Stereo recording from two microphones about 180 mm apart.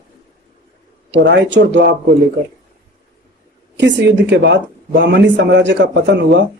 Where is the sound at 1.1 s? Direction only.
80° right.